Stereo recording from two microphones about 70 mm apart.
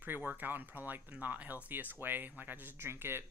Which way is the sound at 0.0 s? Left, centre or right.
Right.